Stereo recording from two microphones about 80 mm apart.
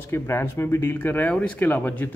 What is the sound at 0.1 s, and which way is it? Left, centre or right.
Mantra, left.